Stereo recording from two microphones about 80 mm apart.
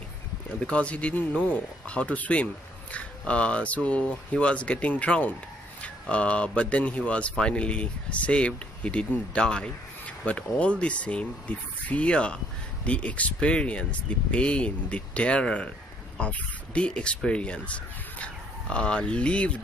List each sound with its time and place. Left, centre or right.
0.6 s speech: centre